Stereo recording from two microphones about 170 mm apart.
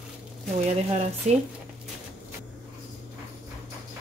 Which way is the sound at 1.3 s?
40° right (ahead or behind).